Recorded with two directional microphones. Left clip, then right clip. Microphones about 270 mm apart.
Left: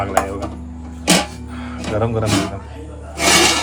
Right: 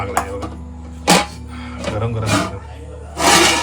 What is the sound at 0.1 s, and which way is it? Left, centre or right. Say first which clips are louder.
Mechanisms: left 2 dB; centre.